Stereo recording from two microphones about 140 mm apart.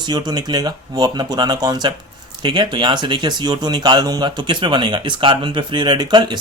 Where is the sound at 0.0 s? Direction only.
30° right (ahead or behind).